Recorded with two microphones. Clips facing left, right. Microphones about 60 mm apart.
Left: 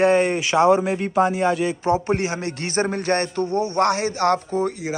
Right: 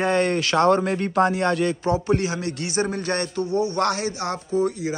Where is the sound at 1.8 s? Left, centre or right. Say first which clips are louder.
Left 4 dB; left.